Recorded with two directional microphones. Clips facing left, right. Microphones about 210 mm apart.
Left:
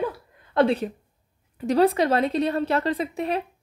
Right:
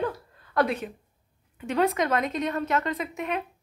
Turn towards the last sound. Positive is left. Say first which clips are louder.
# left 5 dB
turn(degrees=35)  # may be behind; listen again after turning